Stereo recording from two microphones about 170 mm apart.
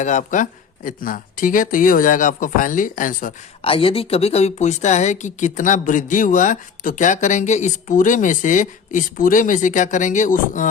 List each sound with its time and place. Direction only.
0.0 s a woman's voice: 45° left (ahead or behind)
3.6 s a woman's voice: 30° left (ahead or behind); by 10.7 s 50° left (ahead or behind)